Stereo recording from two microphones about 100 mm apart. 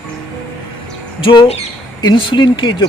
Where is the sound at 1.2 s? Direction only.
65° left (ahead or behind).